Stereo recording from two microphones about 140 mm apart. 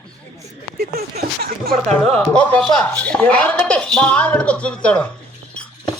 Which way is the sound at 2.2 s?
10° left (ahead or behind).